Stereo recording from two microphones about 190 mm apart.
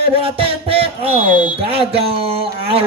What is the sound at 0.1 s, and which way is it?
A man's voice, 30° right (ahead or behind).